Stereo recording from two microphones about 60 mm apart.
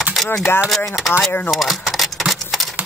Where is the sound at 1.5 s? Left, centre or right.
Centre.